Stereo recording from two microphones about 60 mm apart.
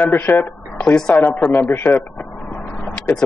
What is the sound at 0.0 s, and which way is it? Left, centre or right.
Speech, left.